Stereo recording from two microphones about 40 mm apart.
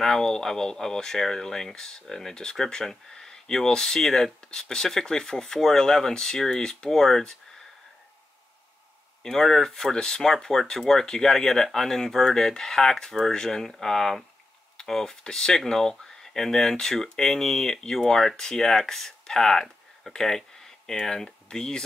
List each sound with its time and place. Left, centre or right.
0.0 s speech: centre
9.2 s speech: centre
20.1 s a sound: centre
21.0 s speech: centre